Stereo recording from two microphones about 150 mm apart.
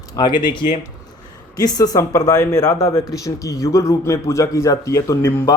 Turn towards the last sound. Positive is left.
turn(degrees=15)  # may be behind; listen again after turning